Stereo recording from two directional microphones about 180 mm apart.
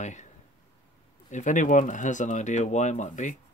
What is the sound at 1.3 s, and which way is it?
Speech, 45° left (ahead or behind).